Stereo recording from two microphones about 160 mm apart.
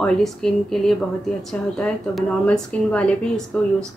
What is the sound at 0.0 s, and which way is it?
A woman's voice, 5° left (ahead or behind).